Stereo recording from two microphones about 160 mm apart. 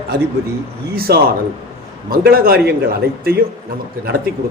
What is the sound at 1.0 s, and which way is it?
A man's voice, 75° right (ahead or behind).